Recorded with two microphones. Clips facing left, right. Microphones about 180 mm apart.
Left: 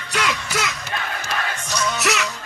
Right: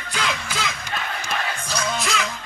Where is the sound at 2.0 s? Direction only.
70° left (ahead or behind).